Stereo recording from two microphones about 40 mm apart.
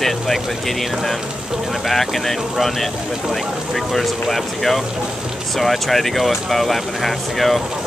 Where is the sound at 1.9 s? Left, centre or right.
Centre.